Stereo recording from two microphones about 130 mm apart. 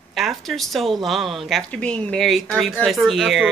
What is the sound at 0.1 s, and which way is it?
Speech, centre (ahead or behind).